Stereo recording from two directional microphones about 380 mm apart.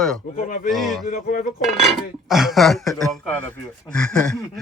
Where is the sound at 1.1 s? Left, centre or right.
Left.